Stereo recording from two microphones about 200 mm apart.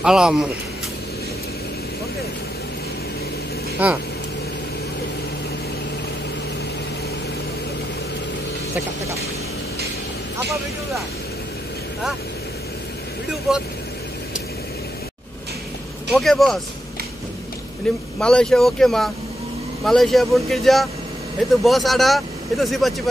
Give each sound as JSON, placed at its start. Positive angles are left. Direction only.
{"t": 0.0, "sound": "speech", "side_deg": -5}
{"t": 3.8, "sound": "speech", "side_deg": -10}
{"t": 13.5, "sound": "speech", "side_deg": 0}
{"t": 16.1, "sound": "speech", "side_deg": 0}
{"t": 17.9, "sound": "speech", "side_deg": 5}